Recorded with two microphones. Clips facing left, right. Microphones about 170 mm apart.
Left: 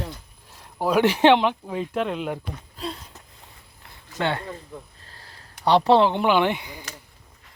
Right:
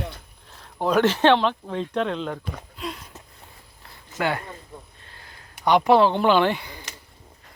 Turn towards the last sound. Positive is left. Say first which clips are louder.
# right 1 dB
turn(degrees=15)  # may be behind; listen again after turning